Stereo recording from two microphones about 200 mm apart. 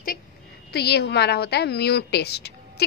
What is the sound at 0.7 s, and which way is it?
A woman's voice, 55° left (ahead or behind).